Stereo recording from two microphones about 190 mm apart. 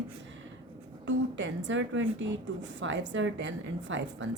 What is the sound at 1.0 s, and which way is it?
A woman's voice, 75° right (ahead or behind).